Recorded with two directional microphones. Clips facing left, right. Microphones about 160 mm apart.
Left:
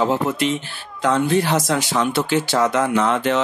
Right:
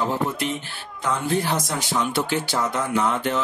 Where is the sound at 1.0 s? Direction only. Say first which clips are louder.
Left 6 dB; 75° left (ahead or behind).